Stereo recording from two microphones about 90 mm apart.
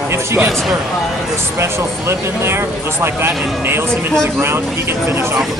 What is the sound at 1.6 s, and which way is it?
Speech, 30° right (ahead or behind).